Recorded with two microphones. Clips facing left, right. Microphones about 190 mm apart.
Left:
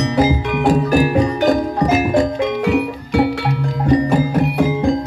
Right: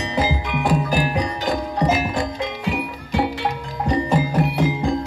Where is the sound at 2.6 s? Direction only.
60° left (ahead or behind).